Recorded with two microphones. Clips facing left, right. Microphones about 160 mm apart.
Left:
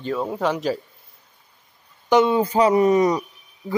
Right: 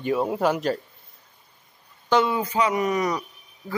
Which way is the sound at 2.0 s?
20° left (ahead or behind).